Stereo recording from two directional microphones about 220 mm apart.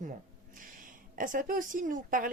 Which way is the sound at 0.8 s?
40° right (ahead or behind).